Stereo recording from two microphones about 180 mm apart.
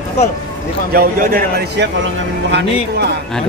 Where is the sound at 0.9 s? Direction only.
50° right (ahead or behind).